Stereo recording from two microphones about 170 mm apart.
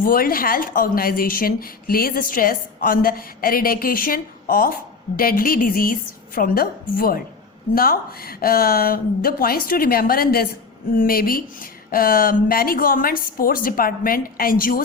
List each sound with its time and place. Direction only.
0.0 s a woman's voice: 60° left (ahead or behind)